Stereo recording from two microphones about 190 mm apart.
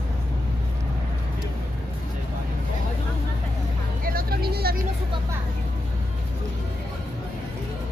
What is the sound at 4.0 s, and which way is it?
Vehicle, 50° right (ahead or behind).